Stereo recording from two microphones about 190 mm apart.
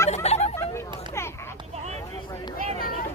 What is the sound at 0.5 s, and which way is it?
Speech, 15° left (ahead or behind).